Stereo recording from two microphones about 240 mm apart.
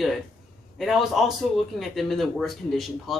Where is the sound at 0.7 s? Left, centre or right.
Centre.